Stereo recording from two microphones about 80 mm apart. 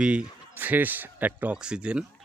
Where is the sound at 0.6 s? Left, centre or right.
Right.